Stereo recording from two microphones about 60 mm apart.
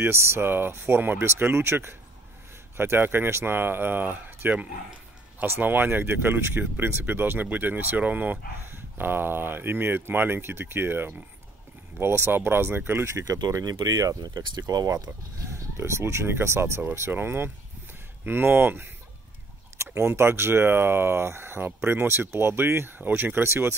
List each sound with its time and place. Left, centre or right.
0.0 s speech: right
13.1 s speech: right
15.8 s speech: right
19.8 s speech: right